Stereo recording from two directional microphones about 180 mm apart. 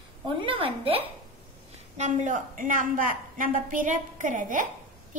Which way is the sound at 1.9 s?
40° right (ahead or behind).